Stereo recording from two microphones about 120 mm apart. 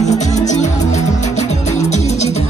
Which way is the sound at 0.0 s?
75° left (ahead or behind).